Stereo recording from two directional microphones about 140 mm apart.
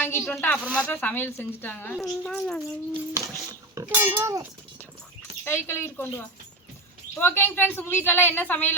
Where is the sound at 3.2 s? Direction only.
25° right (ahead or behind).